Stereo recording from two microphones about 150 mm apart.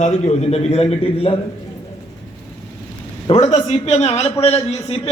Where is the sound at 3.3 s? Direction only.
50° left (ahead or behind).